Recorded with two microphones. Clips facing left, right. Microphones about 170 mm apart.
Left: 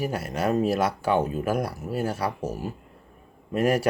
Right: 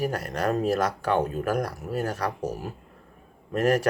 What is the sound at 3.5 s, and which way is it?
Speech, 10° left (ahead or behind).